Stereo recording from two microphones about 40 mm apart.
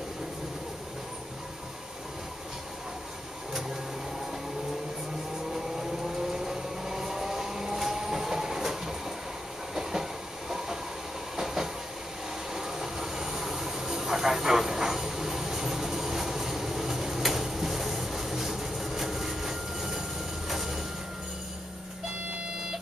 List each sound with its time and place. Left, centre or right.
6.3 s vehicle: centre
9.8 s train: centre
11.3 s train: centre
20.4 s a sound: centre